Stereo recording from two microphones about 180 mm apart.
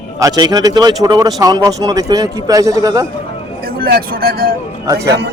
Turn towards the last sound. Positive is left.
turn(degrees=-70)  # may be behind; listen again after turning